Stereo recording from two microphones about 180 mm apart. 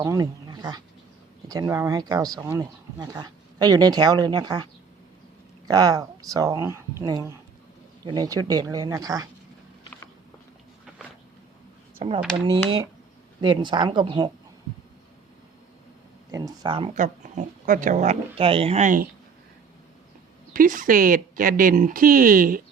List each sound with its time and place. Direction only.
0.0 s speech: 20° right (ahead or behind)
11.9 s speech: 30° right (ahead or behind)
13.4 s speech: 25° right (ahead or behind)
16.3 s speech: 20° right (ahead or behind)
16.9 s speech: 45° right (ahead or behind)
20.5 s speech: 50° right (ahead or behind)